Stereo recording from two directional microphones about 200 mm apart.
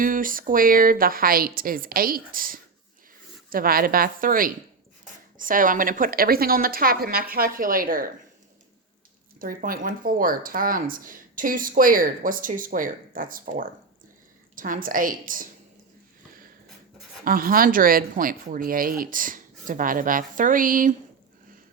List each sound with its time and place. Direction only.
0.0 s speech: 45° right (ahead or behind)
9.4 s speech: 45° right (ahead or behind)
17.2 s speech: 45° right (ahead or behind)